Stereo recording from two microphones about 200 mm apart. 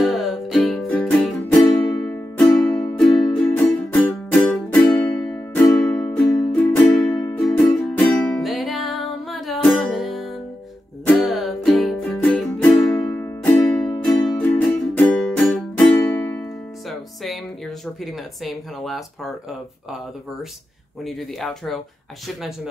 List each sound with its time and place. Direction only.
0.0 s music: centre (ahead or behind)
5.9 s music: 10° left (ahead or behind)
16.9 s a sound: centre (ahead or behind)
21.0 s speech: centre (ahead or behind)